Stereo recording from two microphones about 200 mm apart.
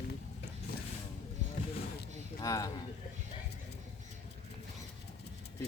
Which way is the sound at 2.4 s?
15° left (ahead or behind).